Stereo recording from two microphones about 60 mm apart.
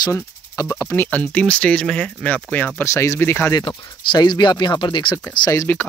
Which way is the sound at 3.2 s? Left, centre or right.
Left.